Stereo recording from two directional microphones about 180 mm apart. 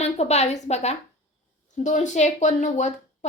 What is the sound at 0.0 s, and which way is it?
A woman's voice, 35° left (ahead or behind).